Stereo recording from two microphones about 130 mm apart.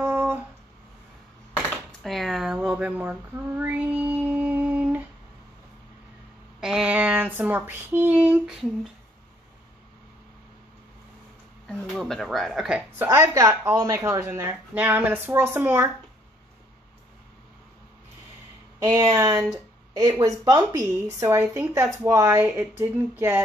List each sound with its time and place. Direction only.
0.0 s a sound: 20° right (ahead or behind)
1.9 s speech: centre (ahead or behind)
6.6 s a sound: 5° right (ahead or behind)
7.3 s speech: 15° right (ahead or behind)
11.6 s speech: 5° left (ahead or behind)
13.0 s speech: 20° right (ahead or behind)
18.9 s speech: 30° right (ahead or behind)